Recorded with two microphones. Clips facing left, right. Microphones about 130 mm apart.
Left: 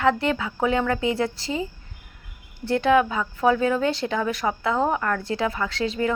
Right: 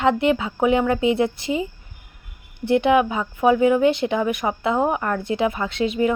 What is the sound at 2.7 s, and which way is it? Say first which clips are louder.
A woman's voice: right 2 dB; 20° right (ahead or behind).